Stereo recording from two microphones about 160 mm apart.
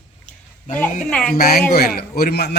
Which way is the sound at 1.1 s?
5° left (ahead or behind).